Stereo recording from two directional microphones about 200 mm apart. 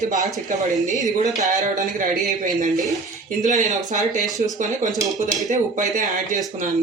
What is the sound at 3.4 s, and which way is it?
Speech, 40° right (ahead or behind).